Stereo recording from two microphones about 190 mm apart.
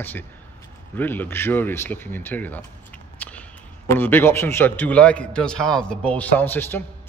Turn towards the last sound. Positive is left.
turn(degrees=10)  # may be behind; listen again after turning